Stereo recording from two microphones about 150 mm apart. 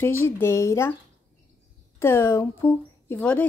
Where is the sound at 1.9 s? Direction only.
15° left (ahead or behind).